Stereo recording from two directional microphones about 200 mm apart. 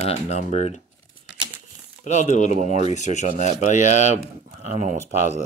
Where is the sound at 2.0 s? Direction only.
35° left (ahead or behind).